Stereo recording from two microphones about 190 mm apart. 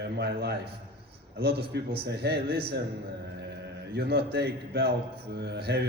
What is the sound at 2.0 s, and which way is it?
Speech, 60° right (ahead or behind).